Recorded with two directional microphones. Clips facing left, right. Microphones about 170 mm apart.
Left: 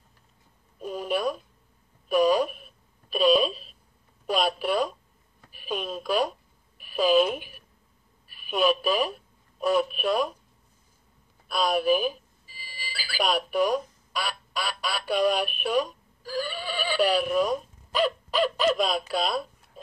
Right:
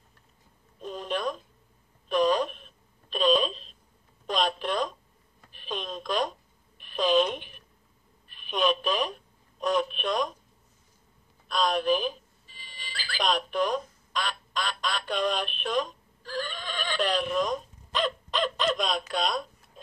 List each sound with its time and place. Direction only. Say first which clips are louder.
0.7 s a sound: left 4 dB; 10° left (ahead or behind)
8.3 s telephone: left 3 dB; 5° left (ahead or behind)
11.4 s alarm clock: left 2 dB; 10° left (ahead or behind)